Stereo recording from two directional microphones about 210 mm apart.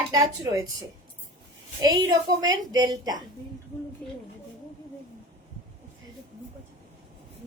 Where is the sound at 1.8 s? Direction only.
15° right (ahead or behind).